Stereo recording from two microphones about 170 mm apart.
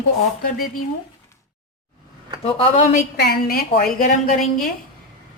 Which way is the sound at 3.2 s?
65° left (ahead or behind).